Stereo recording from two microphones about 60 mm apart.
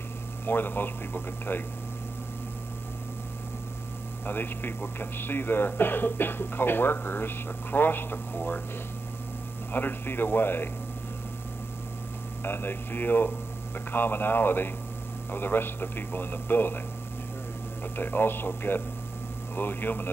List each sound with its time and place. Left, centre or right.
0.5 s speech: left
4.3 s speech: left
9.7 s speech: left
12.4 s speech: left
17.9 s speech: left